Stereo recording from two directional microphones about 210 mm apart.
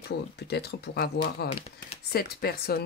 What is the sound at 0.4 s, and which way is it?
A woman's voice, 50° left (ahead or behind).